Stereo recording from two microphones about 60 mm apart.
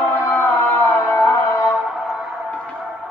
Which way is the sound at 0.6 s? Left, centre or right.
Left.